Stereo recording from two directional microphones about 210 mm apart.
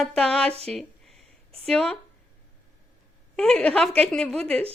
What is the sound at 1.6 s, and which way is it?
Speech, centre (ahead or behind).